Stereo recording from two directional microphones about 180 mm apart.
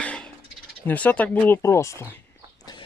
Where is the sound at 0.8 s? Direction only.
10° left (ahead or behind).